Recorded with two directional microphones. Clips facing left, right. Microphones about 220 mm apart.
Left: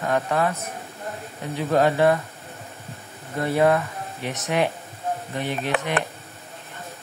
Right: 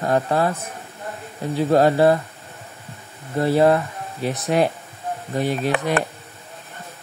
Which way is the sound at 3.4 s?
30° right (ahead or behind).